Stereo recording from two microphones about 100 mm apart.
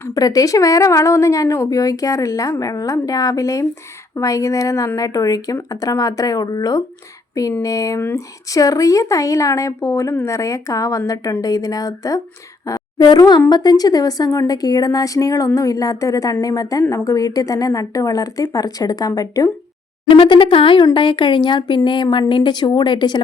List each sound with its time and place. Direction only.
0.1 s speech: 40° left (ahead or behind)
12.6 s a sound: 45° left (ahead or behind)
13.5 s speech: 40° left (ahead or behind)
20.1 s speech: 60° left (ahead or behind)